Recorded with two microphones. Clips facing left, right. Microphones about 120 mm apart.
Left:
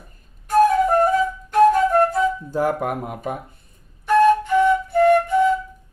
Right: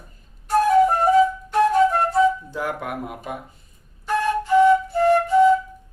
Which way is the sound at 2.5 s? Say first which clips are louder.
Left 6 dB; 40° left (ahead or behind).